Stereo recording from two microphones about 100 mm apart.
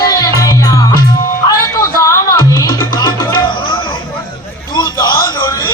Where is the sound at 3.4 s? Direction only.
55° left (ahead or behind).